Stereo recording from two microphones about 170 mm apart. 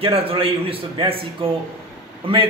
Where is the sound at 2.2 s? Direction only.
30° right (ahead or behind).